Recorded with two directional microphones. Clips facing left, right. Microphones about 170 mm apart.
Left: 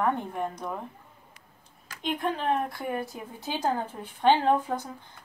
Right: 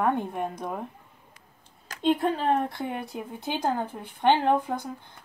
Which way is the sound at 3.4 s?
15° right (ahead or behind).